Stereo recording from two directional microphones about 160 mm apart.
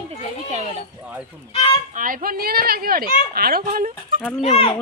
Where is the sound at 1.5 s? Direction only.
35° left (ahead or behind).